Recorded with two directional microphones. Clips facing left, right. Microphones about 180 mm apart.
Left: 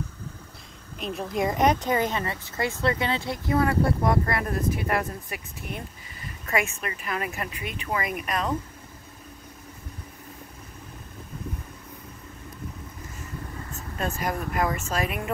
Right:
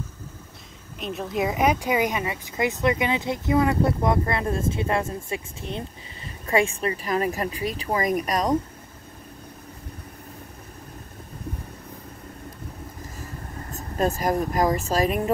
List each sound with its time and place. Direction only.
0.9 s speech: centre (ahead or behind); by 8.5 s 35° right (ahead or behind)
13.2 s speech: 35° right (ahead or behind)